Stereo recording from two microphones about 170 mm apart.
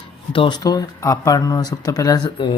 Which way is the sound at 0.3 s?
25° left (ahead or behind).